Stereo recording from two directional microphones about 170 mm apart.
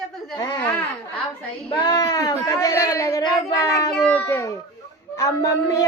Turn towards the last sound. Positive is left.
turn(degrees=20)  # may be behind; listen again after turning